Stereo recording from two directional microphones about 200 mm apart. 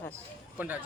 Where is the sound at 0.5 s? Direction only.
10° right (ahead or behind).